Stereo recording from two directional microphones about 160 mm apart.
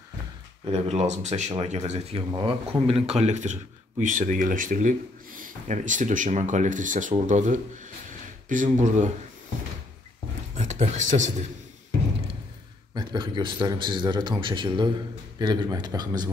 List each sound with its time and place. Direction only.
0.7 s speech: 40° right (ahead or behind)
8.1 s a sound: 55° right (ahead or behind)
10.6 s speech: 45° right (ahead or behind)
12.9 s a man's voice: 30° right (ahead or behind)